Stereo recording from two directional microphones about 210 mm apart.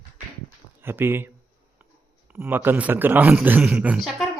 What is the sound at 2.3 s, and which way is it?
A man's voice, 10° right (ahead or behind).